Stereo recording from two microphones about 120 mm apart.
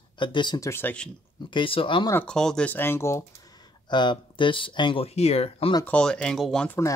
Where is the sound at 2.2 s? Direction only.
5° left (ahead or behind); by 3.5 s 25° left (ahead or behind).